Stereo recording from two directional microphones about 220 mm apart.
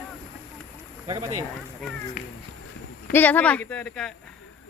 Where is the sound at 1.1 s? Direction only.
15° right (ahead or behind).